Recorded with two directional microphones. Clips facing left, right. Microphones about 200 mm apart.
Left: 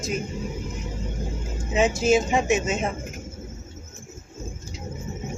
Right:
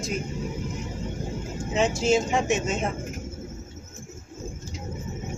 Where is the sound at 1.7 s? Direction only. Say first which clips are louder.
Left 2 dB; 5° left (ahead or behind).